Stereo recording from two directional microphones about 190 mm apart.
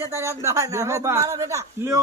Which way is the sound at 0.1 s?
15° right (ahead or behind).